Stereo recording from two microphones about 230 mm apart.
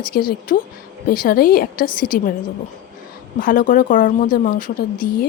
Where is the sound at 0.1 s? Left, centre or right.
Left.